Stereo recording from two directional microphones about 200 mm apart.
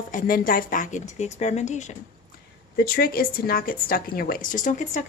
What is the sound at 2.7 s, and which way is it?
Speech, 50° left (ahead or behind).